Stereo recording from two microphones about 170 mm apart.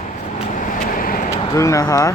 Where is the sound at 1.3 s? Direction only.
20° left (ahead or behind).